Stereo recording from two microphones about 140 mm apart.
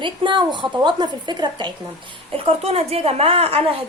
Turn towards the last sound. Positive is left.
turn(degrees=-45)  # may be behind; listen again after turning